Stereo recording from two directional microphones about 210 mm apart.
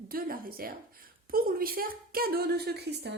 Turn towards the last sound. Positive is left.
turn(degrees=-50)  # may be behind; listen again after turning